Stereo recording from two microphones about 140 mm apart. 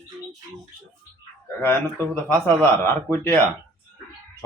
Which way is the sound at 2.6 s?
15° left (ahead or behind).